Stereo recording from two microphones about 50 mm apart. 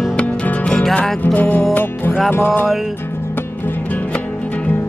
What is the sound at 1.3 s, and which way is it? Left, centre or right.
Music, left.